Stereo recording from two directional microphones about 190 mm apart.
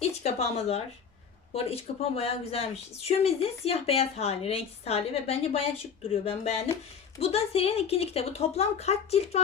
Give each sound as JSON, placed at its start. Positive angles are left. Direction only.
{"t": 0.0, "sound": "speech", "side_deg": 35}